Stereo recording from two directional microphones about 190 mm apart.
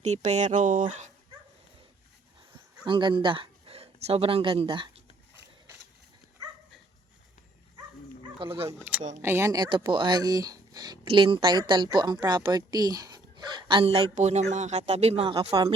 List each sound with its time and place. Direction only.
0.0 s speech: 35° right (ahead or behind)
2.5 s a sound: 25° right (ahead or behind)
8.4 s speech: 30° right (ahead or behind)
9.2 s speech: 15° right (ahead or behind)